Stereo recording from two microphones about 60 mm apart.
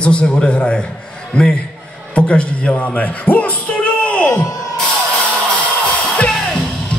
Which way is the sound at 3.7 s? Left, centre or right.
Left.